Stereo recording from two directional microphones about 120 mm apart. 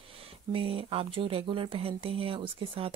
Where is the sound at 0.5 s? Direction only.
50° right (ahead or behind).